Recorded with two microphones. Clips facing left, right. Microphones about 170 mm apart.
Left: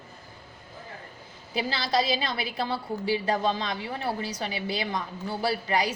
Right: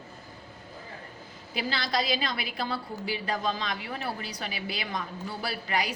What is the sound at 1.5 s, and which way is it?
A woman's voice, 30° left (ahead or behind).